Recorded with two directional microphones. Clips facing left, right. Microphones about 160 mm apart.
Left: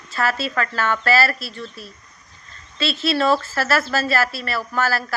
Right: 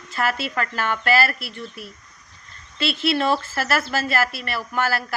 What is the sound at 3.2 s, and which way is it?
Speech, 15° right (ahead or behind).